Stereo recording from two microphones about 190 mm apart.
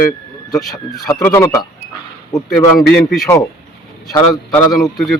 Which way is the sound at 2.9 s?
5° left (ahead or behind).